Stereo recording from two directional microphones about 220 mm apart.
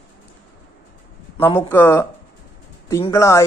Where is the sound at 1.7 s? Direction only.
10° left (ahead or behind).